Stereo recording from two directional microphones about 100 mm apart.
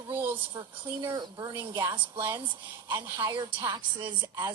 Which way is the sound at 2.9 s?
45° right (ahead or behind).